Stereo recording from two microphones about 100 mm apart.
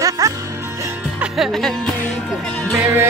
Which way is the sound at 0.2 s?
30° right (ahead or behind).